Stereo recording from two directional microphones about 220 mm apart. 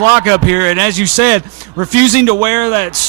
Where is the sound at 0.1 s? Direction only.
15° right (ahead or behind).